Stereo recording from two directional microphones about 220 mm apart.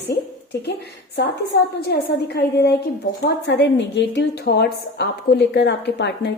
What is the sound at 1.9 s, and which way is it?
A woman's voice, 50° left (ahead or behind).